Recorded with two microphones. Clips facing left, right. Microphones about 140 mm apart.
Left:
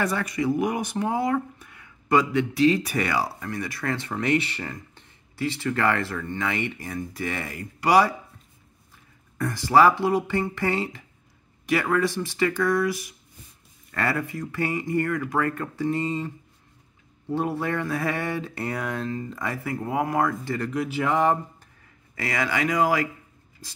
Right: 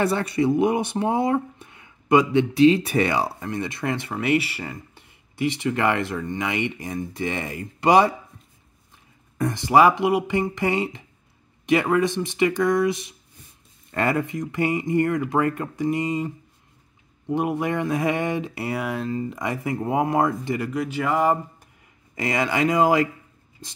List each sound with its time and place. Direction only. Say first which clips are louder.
0.0 s speech: right 4 dB; 30° right (ahead or behind)
9.4 s speech: right 2 dB; 20° right (ahead or behind)
20.7 s speech: left 1 dB; centre (ahead or behind)
22.1 s speech: right 3 dB; 20° right (ahead or behind)